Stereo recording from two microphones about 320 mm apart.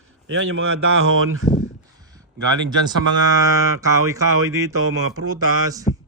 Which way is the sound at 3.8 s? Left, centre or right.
Centre.